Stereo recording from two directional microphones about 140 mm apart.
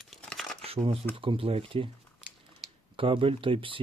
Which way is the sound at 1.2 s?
40° right (ahead or behind).